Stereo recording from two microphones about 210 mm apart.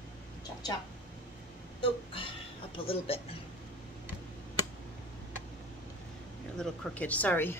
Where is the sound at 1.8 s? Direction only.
25° left (ahead or behind).